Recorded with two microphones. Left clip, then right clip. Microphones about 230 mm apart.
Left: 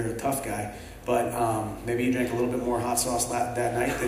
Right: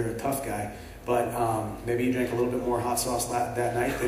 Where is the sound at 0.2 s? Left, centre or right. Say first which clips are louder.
Left 1 dB; left.